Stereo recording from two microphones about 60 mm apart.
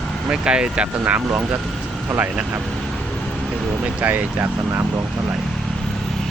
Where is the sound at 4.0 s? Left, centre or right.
Right.